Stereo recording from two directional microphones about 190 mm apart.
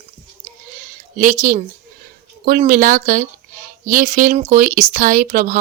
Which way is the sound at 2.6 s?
45° right (ahead or behind).